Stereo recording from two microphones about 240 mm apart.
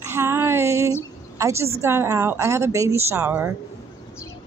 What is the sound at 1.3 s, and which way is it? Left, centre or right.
A woman's voice, centre.